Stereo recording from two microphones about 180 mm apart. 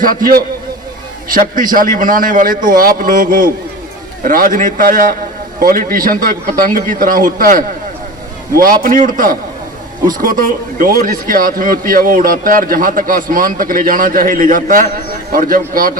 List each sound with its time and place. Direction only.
0.0 s speech: 50° right (ahead or behind)